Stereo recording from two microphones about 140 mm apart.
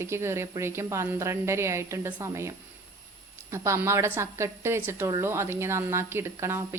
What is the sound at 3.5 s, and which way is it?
A woman's voice, 20° right (ahead or behind).